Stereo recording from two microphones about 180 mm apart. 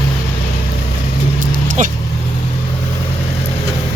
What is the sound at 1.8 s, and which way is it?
Speech, 45° right (ahead or behind).